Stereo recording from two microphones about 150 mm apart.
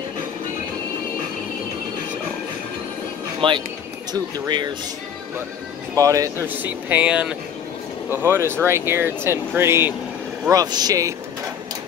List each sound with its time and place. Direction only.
3.3 s speech: 35° right (ahead or behind)
5.9 s speech: 20° right (ahead or behind)
10.5 s speech: 25° right (ahead or behind)